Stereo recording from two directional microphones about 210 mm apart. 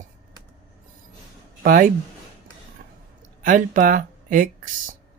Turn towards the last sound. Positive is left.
turn(degrees=-40)  # may be behind; listen again after turning